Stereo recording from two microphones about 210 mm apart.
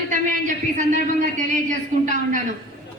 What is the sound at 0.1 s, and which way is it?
A man's voice, 35° right (ahead or behind).